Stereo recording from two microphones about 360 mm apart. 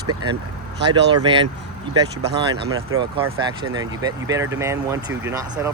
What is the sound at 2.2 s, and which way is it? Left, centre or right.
Speech, right.